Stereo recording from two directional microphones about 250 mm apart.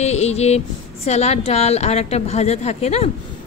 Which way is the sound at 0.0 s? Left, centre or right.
Left.